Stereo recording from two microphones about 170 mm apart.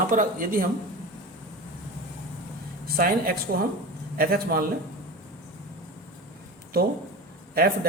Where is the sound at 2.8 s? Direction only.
60° right (ahead or behind).